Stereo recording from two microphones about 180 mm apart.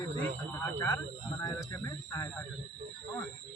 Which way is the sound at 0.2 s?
10° left (ahead or behind).